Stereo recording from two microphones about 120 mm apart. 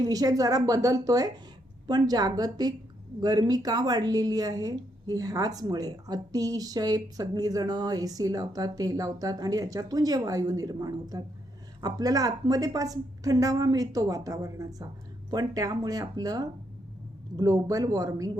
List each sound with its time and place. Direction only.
0.0 s a woman's voice: 30° right (ahead or behind)